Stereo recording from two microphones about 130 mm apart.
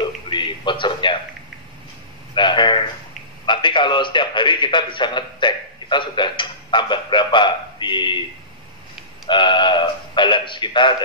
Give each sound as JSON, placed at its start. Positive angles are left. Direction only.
{"t": 0.0, "sound": "a man's voice", "side_deg": 40}
{"t": 2.3, "sound": "a man's voice", "side_deg": 35}
{"t": 9.3, "sound": "a man's voice", "side_deg": 35}